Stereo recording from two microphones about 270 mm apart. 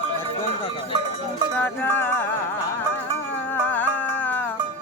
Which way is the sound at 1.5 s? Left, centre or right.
Centre.